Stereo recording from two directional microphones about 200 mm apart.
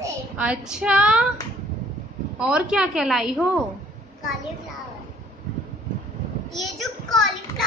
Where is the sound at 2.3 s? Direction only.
5° right (ahead or behind).